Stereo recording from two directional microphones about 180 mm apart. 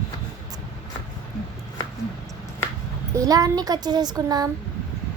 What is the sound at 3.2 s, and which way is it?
A child's voice, 20° right (ahead or behind).